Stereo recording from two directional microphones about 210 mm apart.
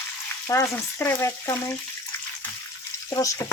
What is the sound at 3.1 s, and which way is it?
Frying, 15° left (ahead or behind).